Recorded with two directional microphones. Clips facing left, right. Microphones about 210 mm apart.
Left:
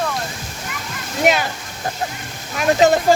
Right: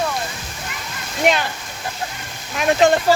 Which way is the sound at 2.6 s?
5° left (ahead or behind).